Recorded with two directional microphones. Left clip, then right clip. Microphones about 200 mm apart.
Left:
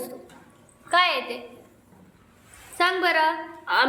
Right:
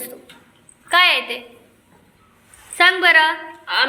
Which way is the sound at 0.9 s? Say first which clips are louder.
Right 6 dB; 5° right (ahead or behind).